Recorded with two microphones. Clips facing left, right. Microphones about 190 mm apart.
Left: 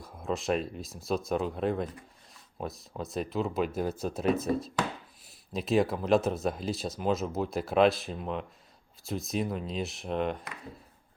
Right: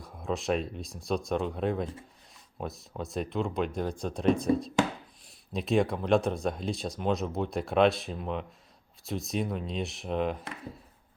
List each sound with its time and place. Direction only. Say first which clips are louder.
0.0 s speech: even; centre (ahead or behind)